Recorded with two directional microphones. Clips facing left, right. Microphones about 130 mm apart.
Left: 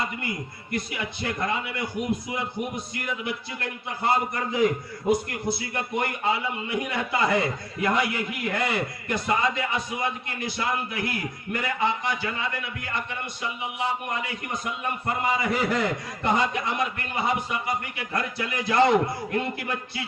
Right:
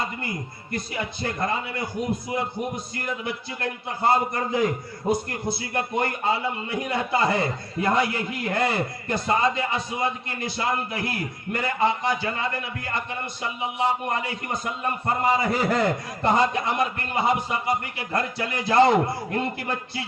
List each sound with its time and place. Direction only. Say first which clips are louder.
0.0 s a man's voice: even; 35° right (ahead or behind)
3.2 s a man's voice: right 2 dB; 40° right (ahead or behind)